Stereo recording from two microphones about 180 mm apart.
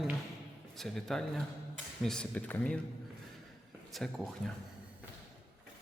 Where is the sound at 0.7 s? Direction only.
Centre (ahead or behind).